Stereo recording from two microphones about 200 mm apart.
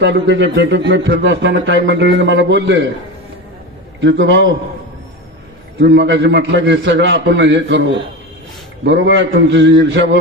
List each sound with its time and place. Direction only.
0.0 s a man's voice: 65° right (ahead or behind)
4.0 s a man's voice: 60° right (ahead or behind)
5.8 s a man's voice: 65° right (ahead or behind)